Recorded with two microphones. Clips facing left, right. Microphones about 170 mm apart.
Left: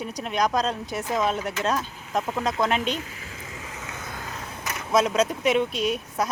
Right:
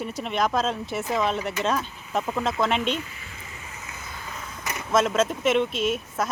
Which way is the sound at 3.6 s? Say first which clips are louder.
Left 4 dB; 90° left.